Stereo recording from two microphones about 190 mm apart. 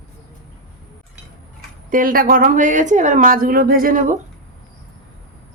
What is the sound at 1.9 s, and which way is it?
A woman's voice, 45° right (ahead or behind).